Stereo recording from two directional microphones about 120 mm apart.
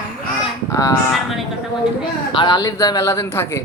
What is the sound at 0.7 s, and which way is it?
Speech, 25° left (ahead or behind).